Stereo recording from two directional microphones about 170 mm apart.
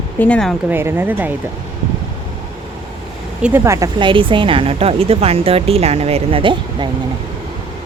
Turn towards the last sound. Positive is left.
turn(degrees=-30)  # may be behind; listen again after turning